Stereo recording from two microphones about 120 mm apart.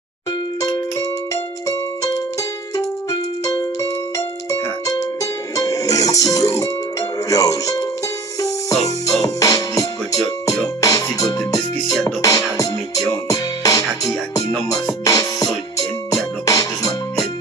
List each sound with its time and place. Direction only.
0.6 s music: 30° left (ahead or behind)